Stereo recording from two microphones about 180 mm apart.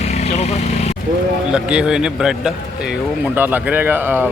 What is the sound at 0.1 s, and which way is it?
Vehicle, 35° left (ahead or behind).